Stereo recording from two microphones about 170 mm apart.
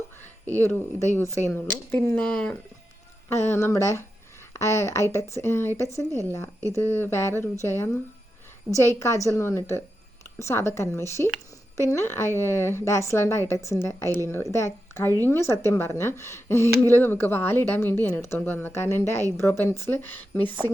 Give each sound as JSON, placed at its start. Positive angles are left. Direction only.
{"t": 0.4, "sound": "a woman's voice", "side_deg": 10}